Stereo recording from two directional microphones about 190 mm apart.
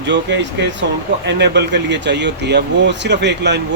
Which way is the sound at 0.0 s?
70° right (ahead or behind).